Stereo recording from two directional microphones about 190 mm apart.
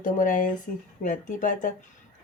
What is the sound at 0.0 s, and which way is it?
Speech, 45° left (ahead or behind).